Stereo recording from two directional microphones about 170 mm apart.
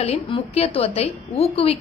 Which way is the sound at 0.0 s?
40° left (ahead or behind).